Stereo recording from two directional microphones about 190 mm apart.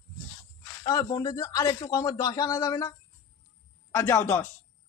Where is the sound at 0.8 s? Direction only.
20° left (ahead or behind).